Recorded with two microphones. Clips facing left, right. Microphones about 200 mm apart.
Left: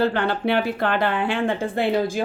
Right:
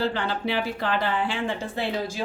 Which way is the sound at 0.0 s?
60° left (ahead or behind).